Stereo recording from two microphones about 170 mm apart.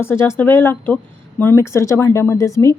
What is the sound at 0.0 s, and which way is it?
A woman's voice, 15° left (ahead or behind).